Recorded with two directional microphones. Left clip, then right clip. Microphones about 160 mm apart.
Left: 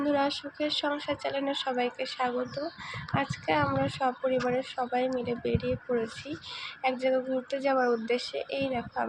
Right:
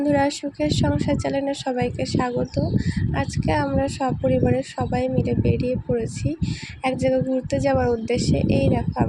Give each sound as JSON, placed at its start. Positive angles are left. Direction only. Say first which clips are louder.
{"t": 0.0, "sound": "speech", "louder": "right 7 dB", "side_deg": -50}